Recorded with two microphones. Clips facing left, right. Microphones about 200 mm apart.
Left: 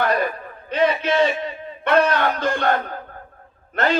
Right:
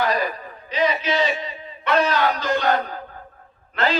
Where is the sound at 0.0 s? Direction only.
55° left (ahead or behind).